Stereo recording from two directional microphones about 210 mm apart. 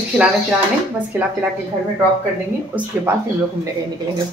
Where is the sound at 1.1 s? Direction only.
5° right (ahead or behind).